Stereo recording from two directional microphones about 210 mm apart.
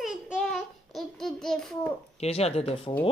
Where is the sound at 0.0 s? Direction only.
Centre (ahead or behind).